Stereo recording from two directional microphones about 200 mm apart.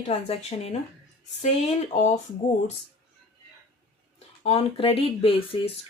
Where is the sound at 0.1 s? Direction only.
30° left (ahead or behind).